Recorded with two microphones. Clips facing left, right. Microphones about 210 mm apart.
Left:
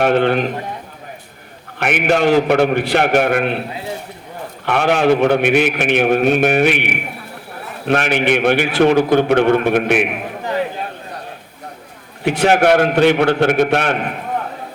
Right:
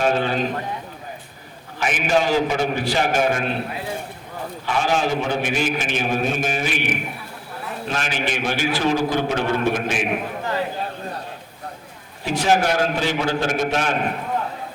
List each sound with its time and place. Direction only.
0.0 s a man's voice: 65° left (ahead or behind)
1.8 s a man's voice: 65° left (ahead or behind)
4.6 s a man's voice: 65° left (ahead or behind)
12.2 s a man's voice: 60° left (ahead or behind)